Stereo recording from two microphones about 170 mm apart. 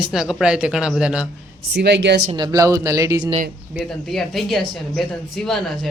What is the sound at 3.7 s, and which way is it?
Speech, centre (ahead or behind).